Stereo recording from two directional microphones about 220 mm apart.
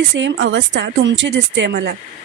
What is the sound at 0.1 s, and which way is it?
A woman's voice, 55° right (ahead or behind).